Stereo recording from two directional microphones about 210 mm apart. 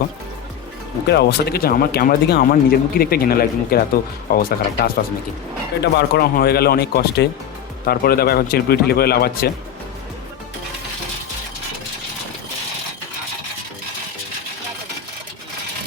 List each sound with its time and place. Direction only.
1.0 s speech: 50° left (ahead or behind)